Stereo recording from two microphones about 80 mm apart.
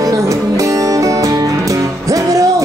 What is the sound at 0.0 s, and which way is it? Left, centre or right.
Music, right.